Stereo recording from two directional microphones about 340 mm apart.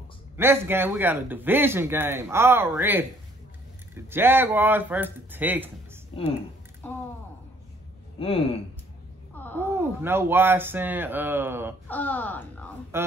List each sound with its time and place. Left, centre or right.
0.4 s a man's voice: centre
6.8 s speech: centre
8.2 s speech: centre
9.3 s a sound: centre
9.7 s a man's voice: centre
11.9 s speech: centre
12.9 s a man's voice: centre